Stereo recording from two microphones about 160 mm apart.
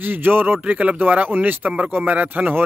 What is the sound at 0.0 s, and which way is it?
Speech, 10° right (ahead or behind).